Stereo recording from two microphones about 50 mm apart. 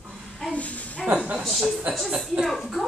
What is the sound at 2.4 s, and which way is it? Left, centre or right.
Speech, centre.